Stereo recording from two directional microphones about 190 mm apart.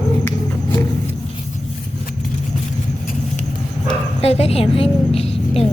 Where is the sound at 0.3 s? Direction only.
10° left (ahead or behind).